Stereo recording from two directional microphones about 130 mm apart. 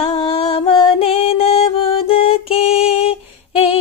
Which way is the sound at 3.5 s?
50° left (ahead or behind).